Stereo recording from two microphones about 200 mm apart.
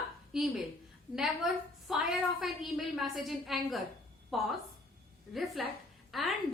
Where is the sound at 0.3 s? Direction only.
Centre (ahead or behind).